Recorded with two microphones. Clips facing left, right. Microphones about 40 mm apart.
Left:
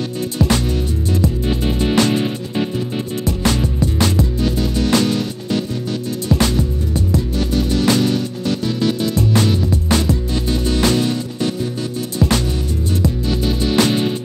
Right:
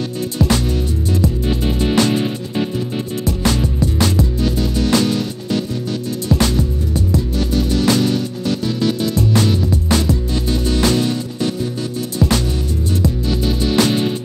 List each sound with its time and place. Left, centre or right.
0.4 s music: left